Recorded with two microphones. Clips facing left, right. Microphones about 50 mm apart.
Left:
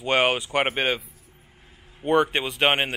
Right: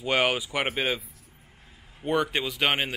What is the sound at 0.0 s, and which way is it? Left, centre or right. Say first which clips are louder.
Speech: left 3 dB; left.